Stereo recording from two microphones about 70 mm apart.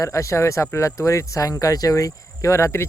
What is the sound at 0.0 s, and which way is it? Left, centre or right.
Cricket, left.